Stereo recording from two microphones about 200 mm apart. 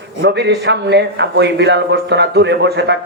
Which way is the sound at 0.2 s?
60° right (ahead or behind).